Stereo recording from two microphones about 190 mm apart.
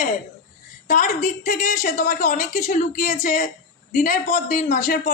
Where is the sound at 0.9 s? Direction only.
45° left (ahead or behind).